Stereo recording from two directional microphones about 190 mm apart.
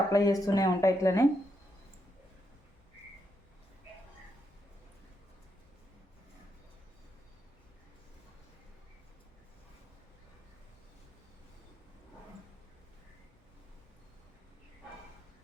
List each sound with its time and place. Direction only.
0.1 s speech: 20° left (ahead or behind)